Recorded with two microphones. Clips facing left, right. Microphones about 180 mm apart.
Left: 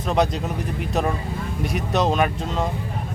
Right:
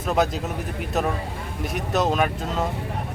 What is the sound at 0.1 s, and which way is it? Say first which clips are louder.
Speech: left 1 dB; 5° right (ahead or behind).